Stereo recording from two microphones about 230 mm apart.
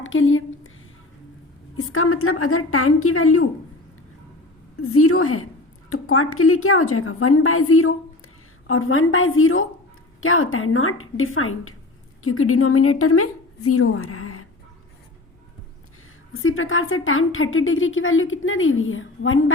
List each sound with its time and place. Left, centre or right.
0.0 s a sound: left
1.7 s a woman's voice: left
4.8 s a woman's voice: left
16.3 s a woman's voice: left